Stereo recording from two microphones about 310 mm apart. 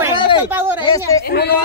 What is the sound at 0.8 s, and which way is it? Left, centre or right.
Speech, centre.